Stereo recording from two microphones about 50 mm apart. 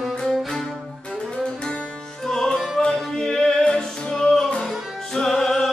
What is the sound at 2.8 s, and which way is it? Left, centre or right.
Music, centre.